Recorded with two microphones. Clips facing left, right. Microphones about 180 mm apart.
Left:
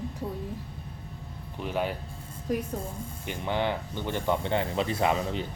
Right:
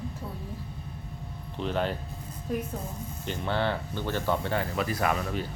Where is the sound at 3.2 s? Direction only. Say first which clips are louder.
Even; 15° left (ahead or behind).